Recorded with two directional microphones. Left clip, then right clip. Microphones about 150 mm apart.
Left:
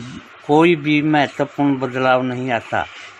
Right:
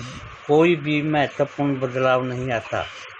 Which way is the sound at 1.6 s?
90° left.